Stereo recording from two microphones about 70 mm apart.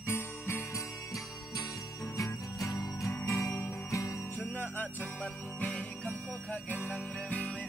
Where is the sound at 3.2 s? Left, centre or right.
Left.